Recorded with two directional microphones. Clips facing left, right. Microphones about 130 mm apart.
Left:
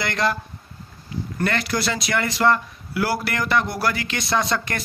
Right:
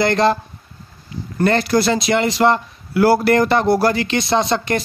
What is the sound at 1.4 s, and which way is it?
Speech, 30° right (ahead or behind).